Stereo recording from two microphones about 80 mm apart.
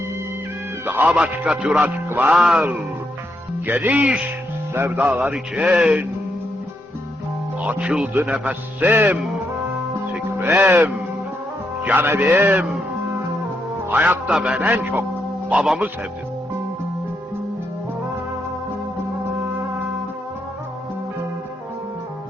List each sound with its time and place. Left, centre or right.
0.9 s music: right
1.2 s speech: centre
3.7 s speech: right
4.7 s music: right
7.6 s speech: centre
8.4 s music: right
10.4 s music: right
13.8 s music: right
14.3 s speech: centre
14.6 s music: right
15.5 s a man's voice: centre